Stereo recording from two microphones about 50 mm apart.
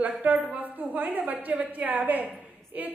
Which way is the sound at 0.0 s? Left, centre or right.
Right.